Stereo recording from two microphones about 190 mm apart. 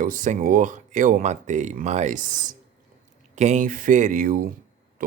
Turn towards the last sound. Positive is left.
turn(degrees=-45)  # may be behind; listen again after turning